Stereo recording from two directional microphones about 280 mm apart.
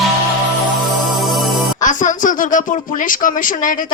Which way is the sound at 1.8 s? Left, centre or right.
Left.